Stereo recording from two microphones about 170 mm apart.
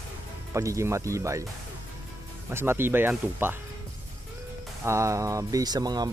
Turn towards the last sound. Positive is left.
turn(degrees=-25)  # may be behind; listen again after turning